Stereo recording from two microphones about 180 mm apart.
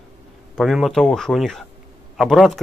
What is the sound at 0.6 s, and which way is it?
Speech, centre (ahead or behind).